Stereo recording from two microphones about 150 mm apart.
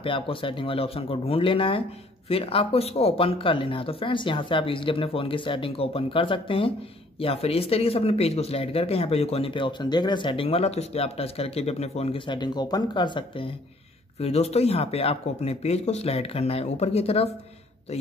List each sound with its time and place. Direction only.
0.0 s speech: 35° left (ahead or behind)
14.2 s speech: 45° left (ahead or behind)